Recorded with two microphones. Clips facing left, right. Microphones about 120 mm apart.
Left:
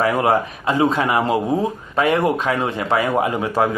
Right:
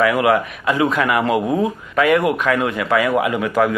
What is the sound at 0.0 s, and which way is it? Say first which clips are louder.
A man's voice: right 2 dB; 35° left (ahead or behind).